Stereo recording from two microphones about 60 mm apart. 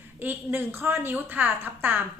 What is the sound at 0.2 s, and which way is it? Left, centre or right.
A woman's voice, right.